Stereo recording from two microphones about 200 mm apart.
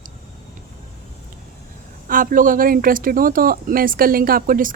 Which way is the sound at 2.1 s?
45° right (ahead or behind).